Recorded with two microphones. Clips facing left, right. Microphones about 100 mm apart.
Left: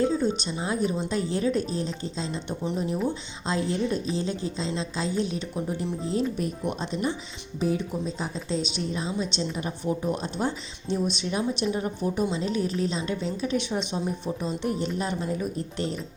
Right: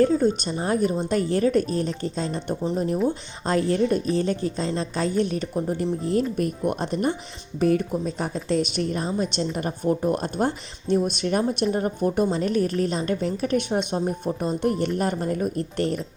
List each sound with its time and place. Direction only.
0.0 s speech: 50° right (ahead or behind)